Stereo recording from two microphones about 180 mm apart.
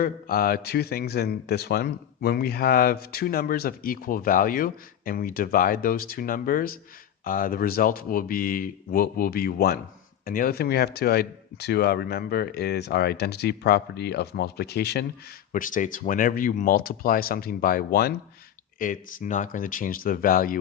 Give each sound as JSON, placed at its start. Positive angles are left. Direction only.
{"t": 0.0, "sound": "speech", "side_deg": 55}
{"t": 15.5, "sound": "speech", "side_deg": 50}